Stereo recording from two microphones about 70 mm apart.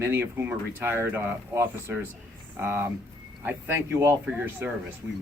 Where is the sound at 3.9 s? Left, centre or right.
Right.